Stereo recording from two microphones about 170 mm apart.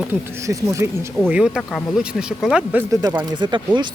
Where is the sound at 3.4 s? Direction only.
25° right (ahead or behind).